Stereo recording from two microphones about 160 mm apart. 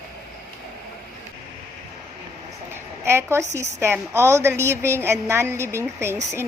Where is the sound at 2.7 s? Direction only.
15° right (ahead or behind).